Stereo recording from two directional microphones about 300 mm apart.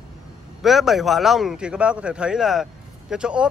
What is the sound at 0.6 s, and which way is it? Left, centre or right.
Speech, centre.